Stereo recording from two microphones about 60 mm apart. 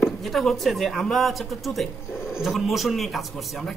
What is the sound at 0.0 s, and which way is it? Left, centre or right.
Speech, centre.